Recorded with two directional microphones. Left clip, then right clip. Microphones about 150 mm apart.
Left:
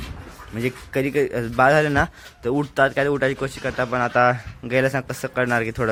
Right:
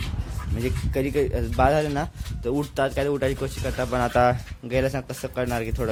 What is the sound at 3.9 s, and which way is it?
Speech, 25° right (ahead or behind).